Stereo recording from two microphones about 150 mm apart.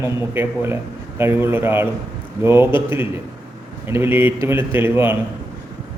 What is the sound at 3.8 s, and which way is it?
Speech, 15° right (ahead or behind).